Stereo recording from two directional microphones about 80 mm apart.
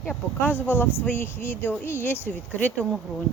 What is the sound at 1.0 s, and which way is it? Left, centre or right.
Speech, left.